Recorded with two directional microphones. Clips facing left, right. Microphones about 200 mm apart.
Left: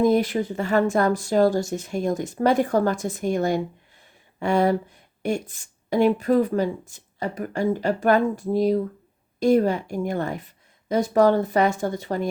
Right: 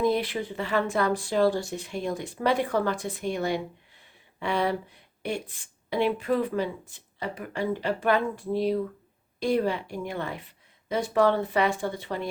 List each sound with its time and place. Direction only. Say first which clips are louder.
0.0 s speech: left 6 dB; 45° left (ahead or behind)